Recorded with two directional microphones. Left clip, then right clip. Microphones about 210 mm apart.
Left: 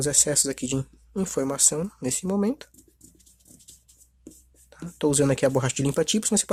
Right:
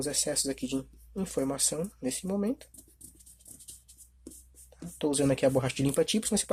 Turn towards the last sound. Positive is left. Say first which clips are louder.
# left 4 dB
turn(degrees=25)  # may be behind; listen again after turning